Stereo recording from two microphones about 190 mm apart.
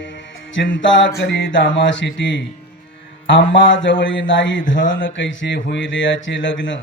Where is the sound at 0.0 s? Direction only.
75° left (ahead or behind).